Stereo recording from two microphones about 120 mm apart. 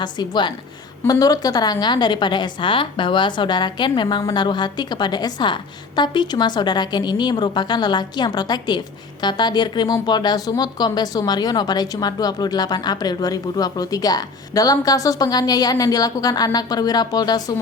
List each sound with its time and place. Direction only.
0.0 s speech: 40° left (ahead or behind)